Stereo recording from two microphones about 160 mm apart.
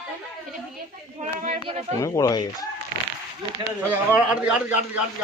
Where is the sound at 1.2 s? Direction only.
50° right (ahead or behind).